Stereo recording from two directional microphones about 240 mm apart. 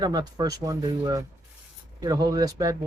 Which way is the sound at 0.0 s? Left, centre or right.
Centre.